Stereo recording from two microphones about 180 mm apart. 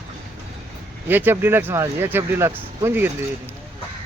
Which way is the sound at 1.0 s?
10° right (ahead or behind).